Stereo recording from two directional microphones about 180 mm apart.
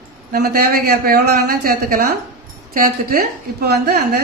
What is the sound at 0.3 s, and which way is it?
A woman's voice, 60° right (ahead or behind).